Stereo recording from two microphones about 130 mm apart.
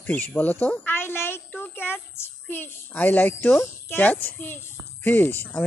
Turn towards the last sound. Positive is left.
turn(degrees=15)  # may be behind; listen again after turning